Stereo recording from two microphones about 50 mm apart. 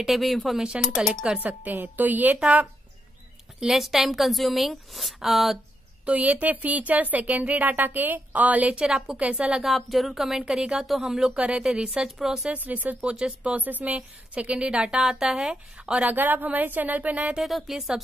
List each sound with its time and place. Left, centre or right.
0.0 s a woman's voice: centre
1.4 s speech: right
3.7 s a woman's voice: centre
6.0 s speech: right
8.7 s a woman's voice: centre
9.6 s a woman's voice: centre
11.3 s speech: right
12.2 s a woman's voice: centre
12.4 s speech: right
13.0 s a woman's voice: centre
15.4 s a woman's voice: centre
16.1 s speech: right
17.4 s a woman's voice: centre